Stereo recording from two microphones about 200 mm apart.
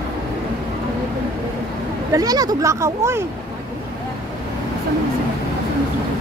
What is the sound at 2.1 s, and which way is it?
Speech, 20° right (ahead or behind).